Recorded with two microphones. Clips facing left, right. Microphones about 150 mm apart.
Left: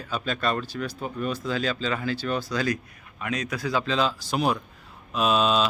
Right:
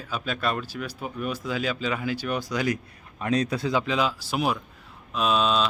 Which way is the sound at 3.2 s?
35° right (ahead or behind).